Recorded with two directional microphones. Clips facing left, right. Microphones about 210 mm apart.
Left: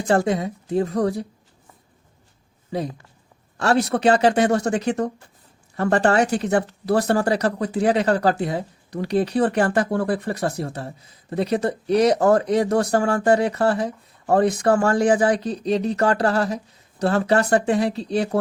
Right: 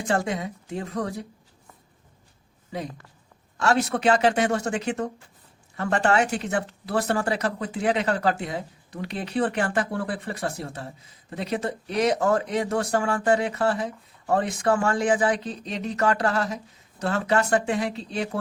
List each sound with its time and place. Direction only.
0.1 s speech: 35° left (ahead or behind)
3.6 s speech: 35° left (ahead or behind)